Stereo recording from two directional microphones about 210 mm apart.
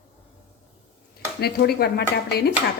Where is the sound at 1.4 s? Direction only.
50° left (ahead or behind).